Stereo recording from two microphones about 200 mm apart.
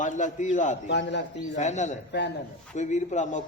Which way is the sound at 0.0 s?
40° left (ahead or behind).